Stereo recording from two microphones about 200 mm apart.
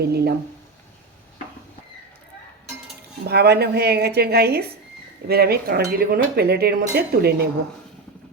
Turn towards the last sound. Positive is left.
turn(degrees=-50)  # may be behind; listen again after turning